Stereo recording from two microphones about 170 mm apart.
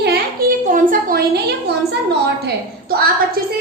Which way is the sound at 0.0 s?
65° right (ahead or behind).